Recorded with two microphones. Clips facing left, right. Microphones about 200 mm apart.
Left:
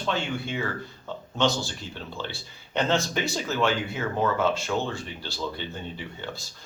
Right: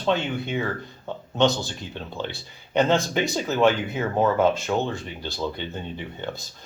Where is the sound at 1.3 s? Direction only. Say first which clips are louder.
Right 4 dB; 20° right (ahead or behind).